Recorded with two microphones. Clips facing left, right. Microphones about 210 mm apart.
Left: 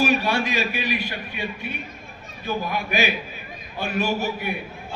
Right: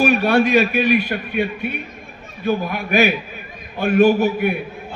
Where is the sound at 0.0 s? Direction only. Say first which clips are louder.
Right 6 dB; 55° right (ahead or behind).